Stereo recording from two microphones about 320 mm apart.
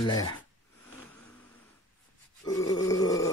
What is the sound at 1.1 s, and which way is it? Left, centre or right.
Vehicle, centre.